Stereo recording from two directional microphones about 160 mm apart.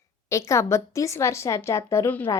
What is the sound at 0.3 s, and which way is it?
A woman's voice, 20° left (ahead or behind).